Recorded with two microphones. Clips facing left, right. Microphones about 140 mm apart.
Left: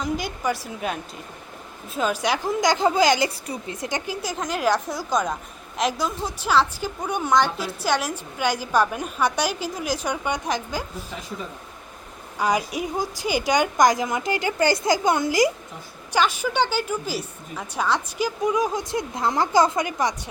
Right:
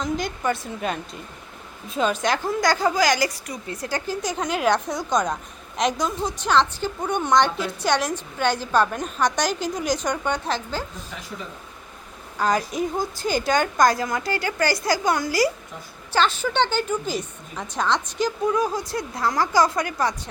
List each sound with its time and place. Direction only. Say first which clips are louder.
0.0 s a woman's voice: right 1 dB; 5° left (ahead or behind)
12.4 s a woman's voice: right 1 dB; 10° left (ahead or behind)